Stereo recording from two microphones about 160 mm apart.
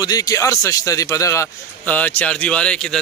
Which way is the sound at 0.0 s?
25° left (ahead or behind).